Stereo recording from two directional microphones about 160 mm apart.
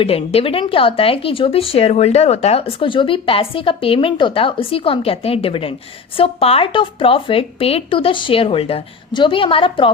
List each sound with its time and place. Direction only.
0.0 s speech: 35° left (ahead or behind)